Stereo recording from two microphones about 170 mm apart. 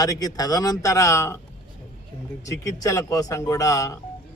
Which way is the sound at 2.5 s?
20° left (ahead or behind).